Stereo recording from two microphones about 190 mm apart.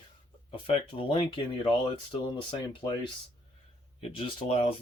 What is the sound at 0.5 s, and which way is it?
Speech, 25° left (ahead or behind).